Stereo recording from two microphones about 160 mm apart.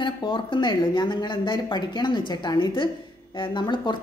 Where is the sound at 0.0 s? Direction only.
30° left (ahead or behind).